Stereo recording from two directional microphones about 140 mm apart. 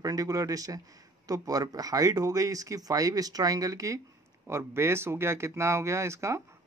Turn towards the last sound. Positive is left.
turn(degrees=-20)  # may be behind; listen again after turning